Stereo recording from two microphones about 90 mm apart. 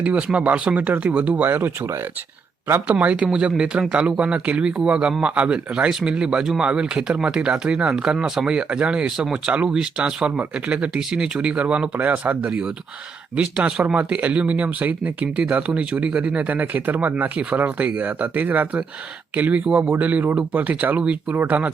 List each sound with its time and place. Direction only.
0.0 s speech: 15° right (ahead or behind)